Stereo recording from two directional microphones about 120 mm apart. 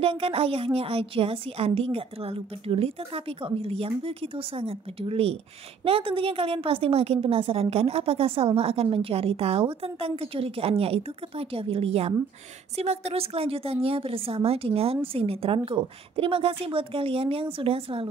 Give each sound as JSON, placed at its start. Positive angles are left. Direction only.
{"t": 0.0, "sound": "a woman's voice", "side_deg": -50}